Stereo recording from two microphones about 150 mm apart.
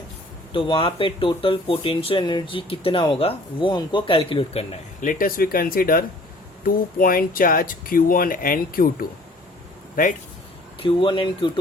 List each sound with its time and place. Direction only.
0.5 s speech: 35° left (ahead or behind)
4.9 s speech: 65° left (ahead or behind)
9.9 s speech: 60° left (ahead or behind)
10.8 s speech: 35° left (ahead or behind)